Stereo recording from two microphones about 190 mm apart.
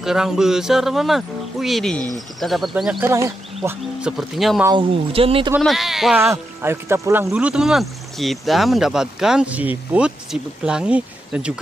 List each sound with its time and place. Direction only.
0.0 s speech: 5° right (ahead or behind)
3.1 s speech: 15° right (ahead or behind)
4.0 s speech: centre (ahead or behind)
4.6 s speech: 25° right (ahead or behind)
5.6 s speech: centre (ahead or behind)
6.2 s speech: 15° right (ahead or behind)